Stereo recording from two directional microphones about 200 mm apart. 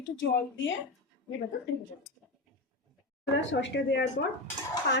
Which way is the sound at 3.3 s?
65° left (ahead or behind).